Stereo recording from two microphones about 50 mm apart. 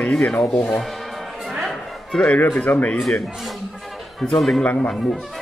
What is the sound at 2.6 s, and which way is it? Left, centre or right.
Speech, left.